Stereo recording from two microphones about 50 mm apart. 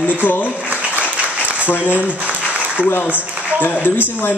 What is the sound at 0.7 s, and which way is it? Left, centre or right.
Applause, right.